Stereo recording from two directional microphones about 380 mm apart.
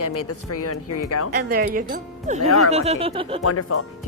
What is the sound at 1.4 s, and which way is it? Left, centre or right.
Speech, right.